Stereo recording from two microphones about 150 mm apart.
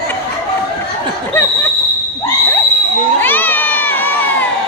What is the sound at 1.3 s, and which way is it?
Laughter, 15° left (ahead or behind).